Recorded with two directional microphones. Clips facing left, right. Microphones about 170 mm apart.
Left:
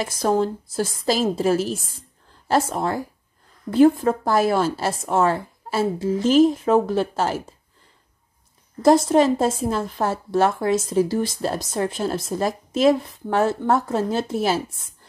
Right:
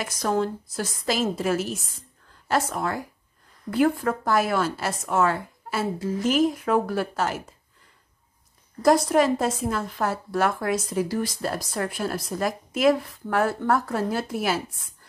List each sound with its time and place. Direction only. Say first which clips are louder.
0.0 s a woman's voice: left 4 dB; 30° left (ahead or behind)
8.8 s a woman's voice: left 4 dB; 25° left (ahead or behind)